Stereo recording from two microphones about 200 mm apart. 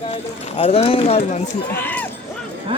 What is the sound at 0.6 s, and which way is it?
Speech, 30° left (ahead or behind).